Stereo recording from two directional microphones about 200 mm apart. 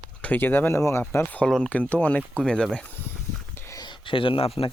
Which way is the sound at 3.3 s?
10° left (ahead or behind).